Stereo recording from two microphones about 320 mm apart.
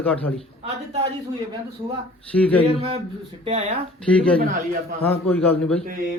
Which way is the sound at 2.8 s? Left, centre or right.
Centre.